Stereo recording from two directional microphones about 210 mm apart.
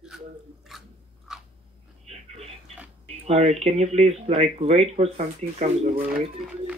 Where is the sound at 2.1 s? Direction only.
30° right (ahead or behind).